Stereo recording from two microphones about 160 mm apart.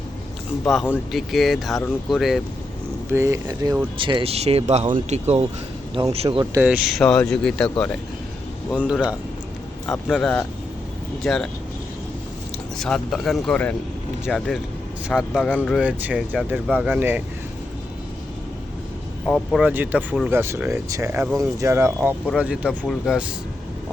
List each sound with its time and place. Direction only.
0.6 s speech: centre (ahead or behind)
3.1 s speech: 15° right (ahead or behind)
3.9 s speech: 30° right (ahead or behind)
6.4 s speech: 15° right (ahead or behind)
6.7 s speech: 5° right (ahead or behind)
8.7 s speech: 5° right (ahead or behind)
12.8 s speech: centre (ahead or behind)
19.2 s speech: centre (ahead or behind)